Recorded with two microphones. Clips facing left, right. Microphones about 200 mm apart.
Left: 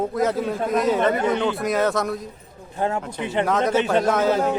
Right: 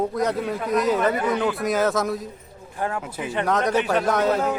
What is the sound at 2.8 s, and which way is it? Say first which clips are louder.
Speech: left 3 dB; 25° left (ahead or behind).